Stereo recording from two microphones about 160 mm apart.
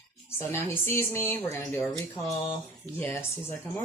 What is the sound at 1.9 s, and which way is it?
Speech, 5° left (ahead or behind).